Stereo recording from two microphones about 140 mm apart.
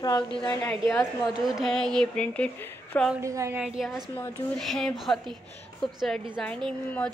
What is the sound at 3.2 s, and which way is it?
Speech, 20° right (ahead or behind).